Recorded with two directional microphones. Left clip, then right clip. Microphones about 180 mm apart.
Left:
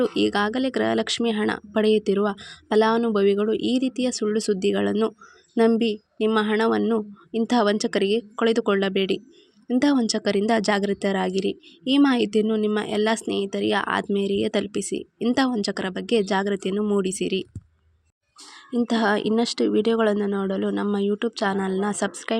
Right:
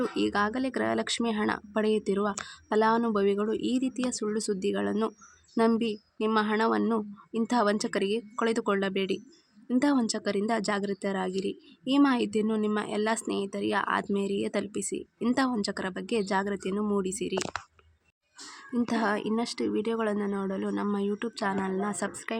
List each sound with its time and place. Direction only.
0.0 s speech: 25° left (ahead or behind)
18.8 s speech: 25° left (ahead or behind)